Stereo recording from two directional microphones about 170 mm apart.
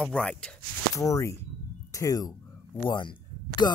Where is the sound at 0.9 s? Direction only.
20° left (ahead or behind).